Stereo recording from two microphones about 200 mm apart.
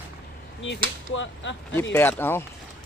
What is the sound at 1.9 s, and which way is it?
Speech, 10° left (ahead or behind).